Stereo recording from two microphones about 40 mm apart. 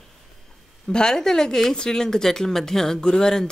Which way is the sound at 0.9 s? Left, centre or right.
Centre.